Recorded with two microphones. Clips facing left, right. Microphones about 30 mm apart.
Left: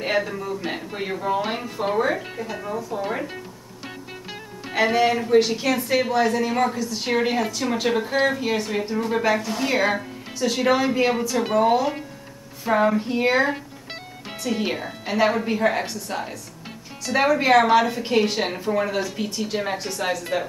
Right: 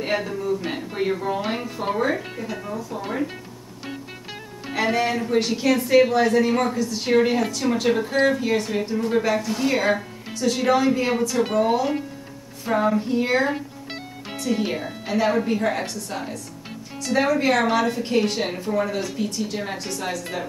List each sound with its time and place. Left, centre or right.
0.0 s speech: centre
0.6 s a woman's voice: centre
4.7 s a woman's voice: centre
12.7 s speech: left